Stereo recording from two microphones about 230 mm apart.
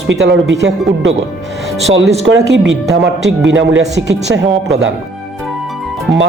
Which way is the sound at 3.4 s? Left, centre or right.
Right.